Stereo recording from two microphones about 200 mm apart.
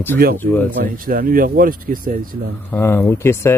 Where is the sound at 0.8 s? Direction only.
45° right (ahead or behind).